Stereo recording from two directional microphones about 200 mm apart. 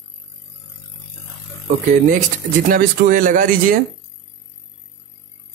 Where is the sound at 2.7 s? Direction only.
45° right (ahead or behind).